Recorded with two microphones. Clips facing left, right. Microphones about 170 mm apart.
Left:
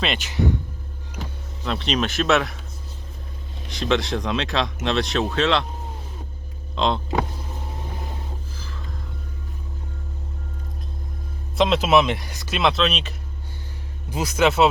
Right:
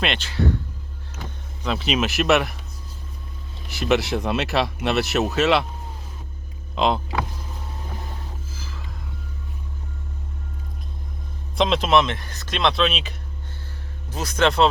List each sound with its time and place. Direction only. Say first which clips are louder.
0.3 s speech: even; 15° left (ahead or behind)
1.6 s speech: right 1 dB; 5° right (ahead or behind)
3.7 s speech: right 1 dB; 5° right (ahead or behind)
6.7 s hum: right 1 dB; 5° right (ahead or behind)
11.5 s speech: left 1 dB; centre (ahead or behind)
14.1 s speech: left 1 dB; 10° left (ahead or behind)